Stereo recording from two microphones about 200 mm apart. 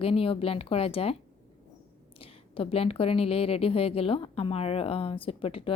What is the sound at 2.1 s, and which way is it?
A woman's voice, 25° left (ahead or behind).